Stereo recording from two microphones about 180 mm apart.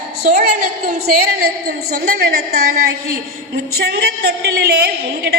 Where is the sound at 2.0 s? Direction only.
55° right (ahead or behind).